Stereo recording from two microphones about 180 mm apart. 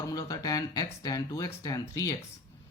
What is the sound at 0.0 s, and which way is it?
Speech, 20° left (ahead or behind).